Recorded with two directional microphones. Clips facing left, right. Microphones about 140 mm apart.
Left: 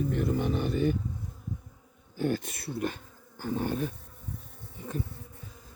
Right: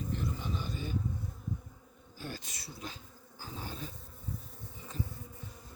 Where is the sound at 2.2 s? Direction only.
60° left (ahead or behind).